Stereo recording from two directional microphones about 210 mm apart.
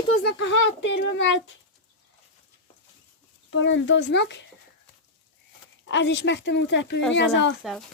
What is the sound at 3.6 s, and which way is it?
Speech, 60° left (ahead or behind).